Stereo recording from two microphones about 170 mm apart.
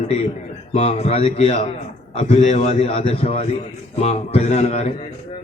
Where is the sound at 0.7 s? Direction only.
40° left (ahead or behind).